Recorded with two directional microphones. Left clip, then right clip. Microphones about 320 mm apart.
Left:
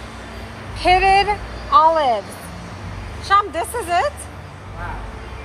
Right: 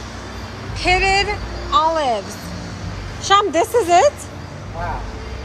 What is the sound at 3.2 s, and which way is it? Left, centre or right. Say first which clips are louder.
Speech: right 2 dB; centre.